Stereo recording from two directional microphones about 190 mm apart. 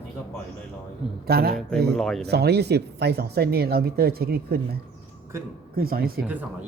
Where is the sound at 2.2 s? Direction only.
60° right (ahead or behind).